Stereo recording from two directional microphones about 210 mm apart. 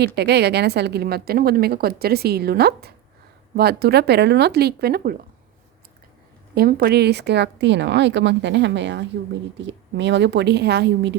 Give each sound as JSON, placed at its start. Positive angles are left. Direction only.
{"t": 0.0, "sound": "a woman's voice", "side_deg": -50}
{"t": 6.5, "sound": "speech", "side_deg": -45}